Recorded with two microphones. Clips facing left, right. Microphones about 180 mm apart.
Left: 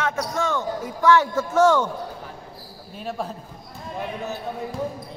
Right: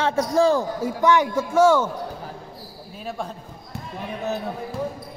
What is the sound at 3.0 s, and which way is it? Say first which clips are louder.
Speech: left 1 dB; centre (ahead or behind).